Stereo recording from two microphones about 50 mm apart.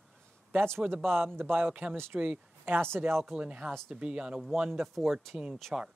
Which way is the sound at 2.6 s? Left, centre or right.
Right.